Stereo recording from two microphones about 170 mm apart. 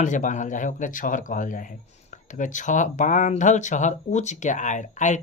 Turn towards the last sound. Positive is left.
turn(degrees=45)  # may be behind; listen again after turning